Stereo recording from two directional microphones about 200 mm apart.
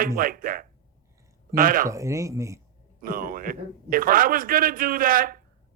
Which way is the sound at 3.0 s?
45° right (ahead or behind).